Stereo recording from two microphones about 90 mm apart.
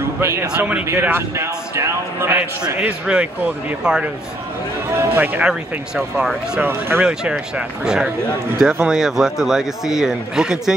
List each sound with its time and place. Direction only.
0.2 s speech: 30° right (ahead or behind)
0.6 s speech: 15° right (ahead or behind)
1.0 s speech: 25° right (ahead or behind)
2.6 s speech: 10° right (ahead or behind)
6.6 s speech: 25° right (ahead or behind)
7.0 s a man's voice: 15° right (ahead or behind)